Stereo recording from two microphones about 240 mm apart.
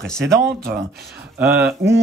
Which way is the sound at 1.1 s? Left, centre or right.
Centre.